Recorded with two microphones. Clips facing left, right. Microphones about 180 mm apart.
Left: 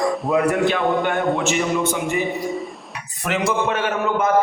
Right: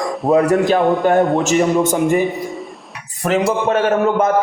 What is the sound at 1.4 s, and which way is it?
Speech, 40° right (ahead or behind).